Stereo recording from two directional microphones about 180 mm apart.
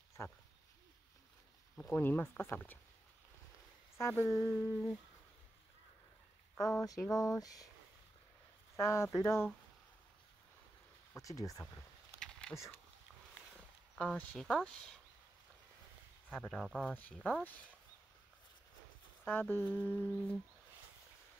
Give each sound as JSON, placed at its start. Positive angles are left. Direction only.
{"t": 0.2, "sound": "speech", "side_deg": 15}
{"t": 1.8, "sound": "speech", "side_deg": 10}
{"t": 4.0, "sound": "speech", "side_deg": 15}
{"t": 6.5, "sound": "speech", "side_deg": 15}
{"t": 8.7, "sound": "speech", "side_deg": 15}
{"t": 11.1, "sound": "speech", "side_deg": 20}
{"t": 12.2, "sound": "a sound", "side_deg": 5}
{"t": 12.5, "sound": "speech", "side_deg": 15}
{"t": 13.9, "sound": "speech", "side_deg": 5}
{"t": 16.3, "sound": "speech", "side_deg": 5}
{"t": 19.2, "sound": "speech", "side_deg": 10}